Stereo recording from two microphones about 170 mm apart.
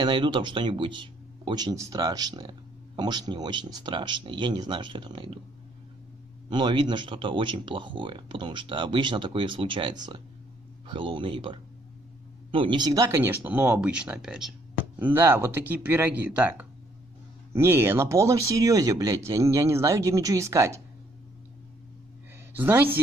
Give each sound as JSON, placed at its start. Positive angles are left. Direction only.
{"t": 0.0, "sound": "speech", "side_deg": -30}
{"t": 6.5, "sound": "speech", "side_deg": -25}
{"t": 22.5, "sound": "a woman's voice", "side_deg": -10}